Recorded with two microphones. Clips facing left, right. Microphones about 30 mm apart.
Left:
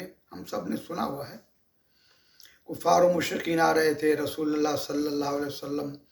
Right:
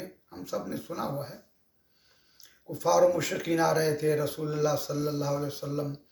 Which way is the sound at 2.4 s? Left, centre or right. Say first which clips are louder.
Left 2 dB; left.